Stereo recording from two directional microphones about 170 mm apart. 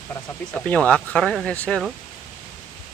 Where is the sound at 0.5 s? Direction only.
10° left (ahead or behind).